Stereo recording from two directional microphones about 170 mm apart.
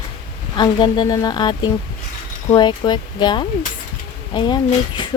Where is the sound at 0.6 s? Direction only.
25° left (ahead or behind).